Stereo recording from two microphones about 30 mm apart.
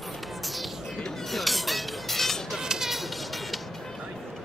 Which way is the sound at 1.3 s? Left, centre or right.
Centre.